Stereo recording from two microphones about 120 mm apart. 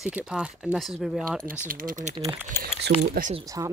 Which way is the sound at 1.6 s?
85° right.